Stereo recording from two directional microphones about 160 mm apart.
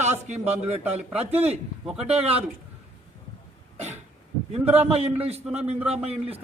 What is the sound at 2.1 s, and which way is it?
Speech, 40° right (ahead or behind).